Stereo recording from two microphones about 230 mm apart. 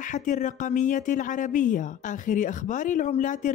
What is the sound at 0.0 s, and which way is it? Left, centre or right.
Speech, left.